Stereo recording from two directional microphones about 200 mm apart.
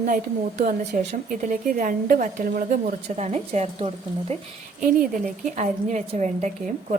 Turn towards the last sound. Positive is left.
turn(degrees=-35)  # may be behind; listen again after turning